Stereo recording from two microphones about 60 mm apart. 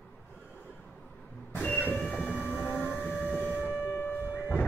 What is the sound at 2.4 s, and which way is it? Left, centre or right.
Train, left.